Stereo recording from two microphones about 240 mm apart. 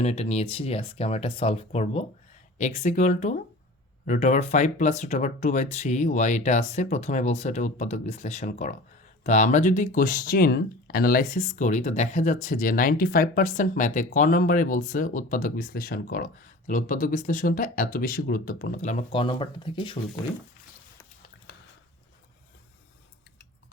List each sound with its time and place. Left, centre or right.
0.0 s speech: left